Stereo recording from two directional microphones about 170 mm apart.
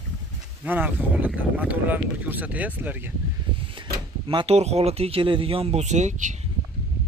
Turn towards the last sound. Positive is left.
turn(degrees=-45)  # may be behind; listen again after turning